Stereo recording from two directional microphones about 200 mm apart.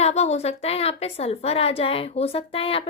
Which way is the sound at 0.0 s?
35° left (ahead or behind).